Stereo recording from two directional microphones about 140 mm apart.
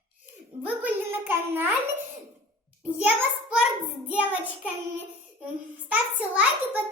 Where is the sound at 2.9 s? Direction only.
10° right (ahead or behind).